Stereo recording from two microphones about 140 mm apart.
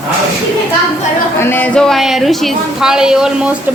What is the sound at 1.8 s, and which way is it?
Speech, centre (ahead or behind).